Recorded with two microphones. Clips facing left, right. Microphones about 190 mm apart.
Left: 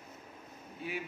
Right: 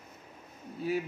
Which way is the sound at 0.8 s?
40° right (ahead or behind).